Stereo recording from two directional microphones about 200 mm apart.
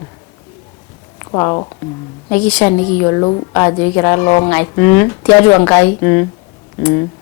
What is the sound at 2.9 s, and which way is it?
Speech, 20° left (ahead or behind).